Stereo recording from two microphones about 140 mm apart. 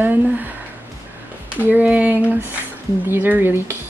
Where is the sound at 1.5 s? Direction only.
10° right (ahead or behind).